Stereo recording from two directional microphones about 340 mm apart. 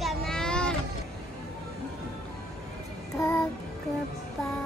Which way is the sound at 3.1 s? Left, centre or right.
Centre.